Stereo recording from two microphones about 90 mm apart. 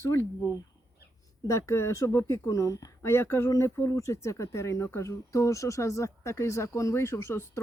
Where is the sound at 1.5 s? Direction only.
35° left (ahead or behind).